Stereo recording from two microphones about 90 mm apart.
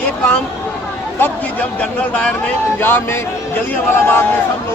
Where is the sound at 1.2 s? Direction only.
15° left (ahead or behind).